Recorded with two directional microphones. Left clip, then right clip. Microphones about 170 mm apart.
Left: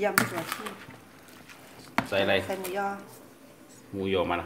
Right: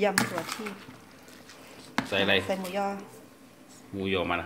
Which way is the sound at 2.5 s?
35° right (ahead or behind).